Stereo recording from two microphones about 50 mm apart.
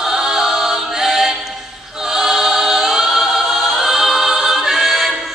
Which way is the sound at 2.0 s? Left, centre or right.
Centre.